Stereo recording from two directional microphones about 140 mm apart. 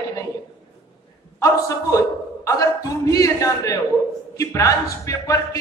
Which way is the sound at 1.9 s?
25° left (ahead or behind).